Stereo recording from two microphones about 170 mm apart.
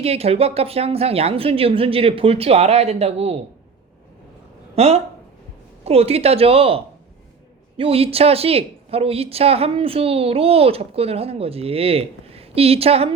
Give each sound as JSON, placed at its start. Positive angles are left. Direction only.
{"t": 0.0, "sound": "speech", "side_deg": -35}
{"t": 4.7, "sound": "speech", "side_deg": -40}